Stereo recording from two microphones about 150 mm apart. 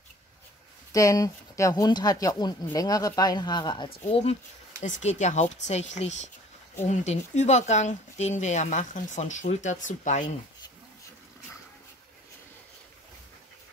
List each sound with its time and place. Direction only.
0.9 s speech: 25° left (ahead or behind)
4.1 s speech: 45° left (ahead or behind)